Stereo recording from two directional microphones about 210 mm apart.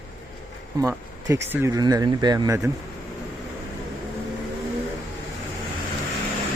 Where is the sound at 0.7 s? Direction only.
15° right (ahead or behind).